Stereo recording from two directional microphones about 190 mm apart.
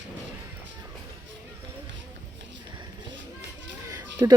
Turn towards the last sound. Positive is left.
turn(degrees=-20)  # may be behind; listen again after turning